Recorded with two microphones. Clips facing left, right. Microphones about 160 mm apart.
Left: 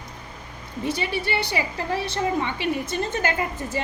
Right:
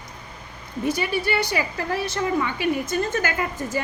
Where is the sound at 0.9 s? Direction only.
25° left (ahead or behind).